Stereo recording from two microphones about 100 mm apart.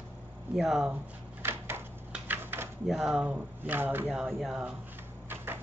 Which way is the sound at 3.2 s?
15° right (ahead or behind).